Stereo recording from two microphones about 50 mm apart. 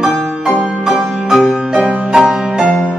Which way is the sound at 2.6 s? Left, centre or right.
Left.